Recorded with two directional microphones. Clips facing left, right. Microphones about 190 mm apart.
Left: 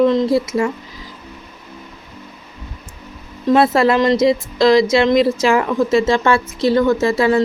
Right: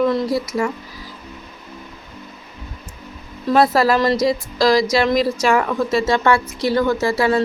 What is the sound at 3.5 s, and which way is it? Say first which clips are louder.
A woman's voice: left 2 dB; 25° left (ahead or behind).